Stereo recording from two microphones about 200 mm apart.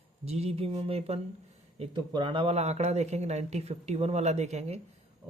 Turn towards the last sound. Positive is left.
turn(degrees=-35)  # may be behind; listen again after turning